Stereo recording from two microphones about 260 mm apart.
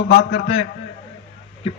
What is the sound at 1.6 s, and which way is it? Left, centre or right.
Speech, left.